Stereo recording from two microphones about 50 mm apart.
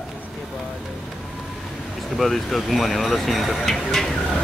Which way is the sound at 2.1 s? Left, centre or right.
Centre.